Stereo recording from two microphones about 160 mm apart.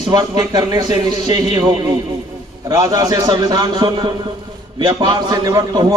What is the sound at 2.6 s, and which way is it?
A man's voice, 20° right (ahead or behind).